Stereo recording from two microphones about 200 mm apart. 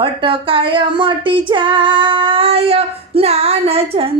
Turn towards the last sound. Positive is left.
turn(degrees=-30)  # may be behind; listen again after turning